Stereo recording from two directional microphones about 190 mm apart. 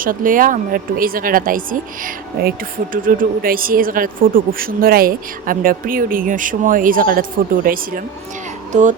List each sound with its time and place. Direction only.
0.0 s speech: 45° right (ahead or behind)